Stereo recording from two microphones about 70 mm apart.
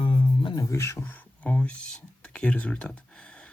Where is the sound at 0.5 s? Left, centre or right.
Left.